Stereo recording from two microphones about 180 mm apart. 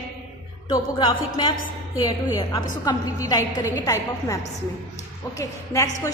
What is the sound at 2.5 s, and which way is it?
A woman's voice, 20° left (ahead or behind).